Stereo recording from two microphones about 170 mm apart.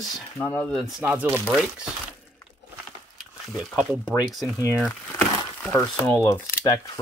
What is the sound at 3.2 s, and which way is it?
Speech, centre (ahead or behind).